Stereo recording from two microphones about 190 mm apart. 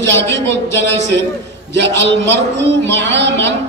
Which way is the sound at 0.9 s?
70° right (ahead or behind).